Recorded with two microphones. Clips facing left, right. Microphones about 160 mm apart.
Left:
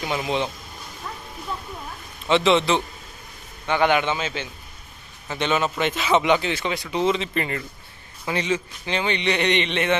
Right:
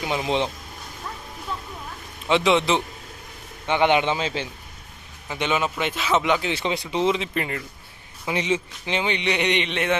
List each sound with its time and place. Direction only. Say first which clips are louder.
0.0 s speech: right 1 dB; 15° right (ahead or behind)
2.2 s a man's voice: left 1 dB; 10° right (ahead or behind); by 4.4 s 30° right (ahead or behind)
5.3 s speech: left 1 dB; 10° right (ahead or behind)
6.6 s a man's voice: even; 25° right (ahead or behind); by 7.6 s 5° right (ahead or behind)
8.2 s a man's voice: even; 15° right (ahead or behind)